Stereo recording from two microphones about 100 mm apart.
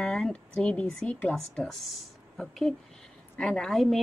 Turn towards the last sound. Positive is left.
turn(degrees=0)  # may be behind; listen again after turning